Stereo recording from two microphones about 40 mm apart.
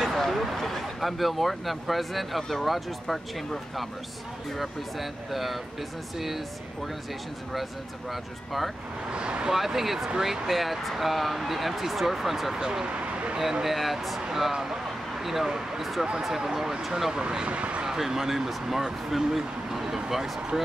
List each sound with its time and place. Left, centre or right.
0.0 s speech: centre
8.1 s speech: centre
9.1 s speech: right
9.5 s speech: centre
10.4 s speech: centre
12.6 s speech: centre
12.9 s a sound: right
13.4 s speech: centre
17.5 s speech: right
17.8 s speech: centre